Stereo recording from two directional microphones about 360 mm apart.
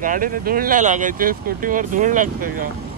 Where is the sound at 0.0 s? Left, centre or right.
Right.